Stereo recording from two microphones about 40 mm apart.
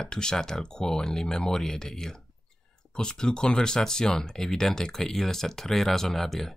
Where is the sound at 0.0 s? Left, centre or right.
Centre.